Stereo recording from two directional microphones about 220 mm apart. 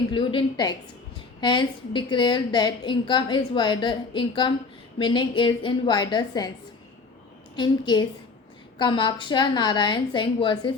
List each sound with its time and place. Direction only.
0.1 s a woman's voice: 20° left (ahead or behind)
7.5 s a woman's voice: 20° left (ahead or behind)